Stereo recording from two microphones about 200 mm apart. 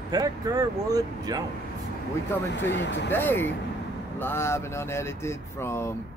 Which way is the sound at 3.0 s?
10° left (ahead or behind).